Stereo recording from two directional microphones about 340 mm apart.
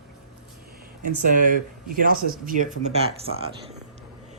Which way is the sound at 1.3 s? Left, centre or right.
Right.